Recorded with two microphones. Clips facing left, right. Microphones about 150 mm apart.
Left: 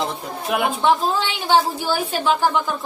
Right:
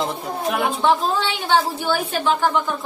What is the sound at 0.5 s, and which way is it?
A woman's voice, 15° left (ahead or behind).